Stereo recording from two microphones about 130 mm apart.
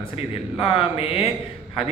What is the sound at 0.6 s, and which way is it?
Speech, 45° left (ahead or behind).